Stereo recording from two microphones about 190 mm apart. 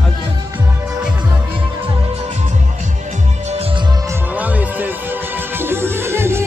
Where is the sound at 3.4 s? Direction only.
30° right (ahead or behind).